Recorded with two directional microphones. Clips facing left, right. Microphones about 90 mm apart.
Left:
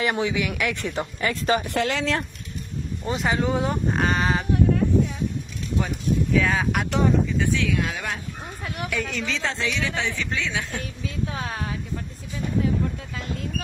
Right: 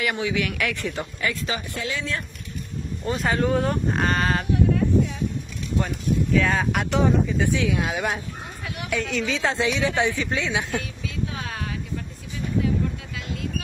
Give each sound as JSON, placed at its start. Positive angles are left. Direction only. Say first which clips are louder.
{"t": 0.0, "sound": "speech", "louder": "left 2 dB", "side_deg": 30}
{"t": 0.4, "sound": "speech", "louder": "even", "side_deg": 20}
{"t": 1.3, "sound": "speech", "louder": "left 6 dB", "side_deg": 45}
{"t": 1.7, "sound": "speech", "louder": "left 5 dB", "side_deg": 70}
{"t": 3.1, "sound": "speech", "louder": "right 1 dB", "side_deg": 10}
{"t": 5.8, "sound": "speech", "louder": "even", "side_deg": 5}
{"t": 7.3, "sound": "speech", "louder": "right 1 dB", "side_deg": -15}
{"t": 8.9, "sound": "speech", "louder": "right 4 dB", "side_deg": 0}
{"t": 9.4, "sound": "speech", "louder": "right 5 dB", "side_deg": -20}
{"t": 11.3, "sound": "vehicle", "louder": "left 2 dB", "side_deg": 30}